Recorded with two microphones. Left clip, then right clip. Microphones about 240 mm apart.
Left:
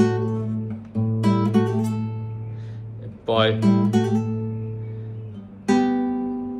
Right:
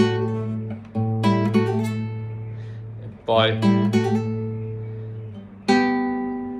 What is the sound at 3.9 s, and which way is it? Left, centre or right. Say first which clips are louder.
Music: right 1 dB; centre.